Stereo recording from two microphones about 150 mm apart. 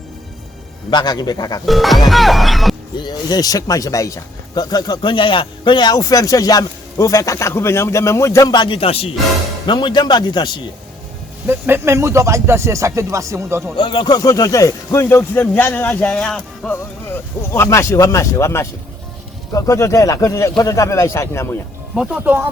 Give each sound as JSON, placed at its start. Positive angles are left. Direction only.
{"t": 0.9, "sound": "speech", "side_deg": 30}
{"t": 1.6, "sound": "speech", "side_deg": 0}
{"t": 3.0, "sound": "speech", "side_deg": 25}
{"t": 11.4, "sound": "speech", "side_deg": -15}
{"t": 13.7, "sound": "speech", "side_deg": 35}
{"t": 17.1, "sound": "speech", "side_deg": 20}
{"t": 21.9, "sound": "speech", "side_deg": -5}